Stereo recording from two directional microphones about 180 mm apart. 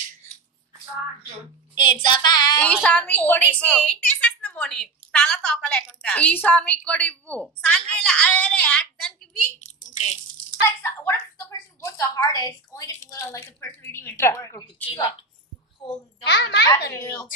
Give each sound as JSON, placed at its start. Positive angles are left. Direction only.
{"t": 1.8, "sound": "child singing", "side_deg": 25}
{"t": 2.6, "sound": "a woman's voice", "side_deg": 10}
{"t": 9.8, "sound": "a sound", "side_deg": 40}
{"t": 10.3, "sound": "a woman's voice", "side_deg": 10}
{"t": 14.9, "sound": "child singing", "side_deg": 30}
{"t": 16.3, "sound": "a child's voice", "side_deg": 65}
{"t": 17.0, "sound": "a woman's voice", "side_deg": 15}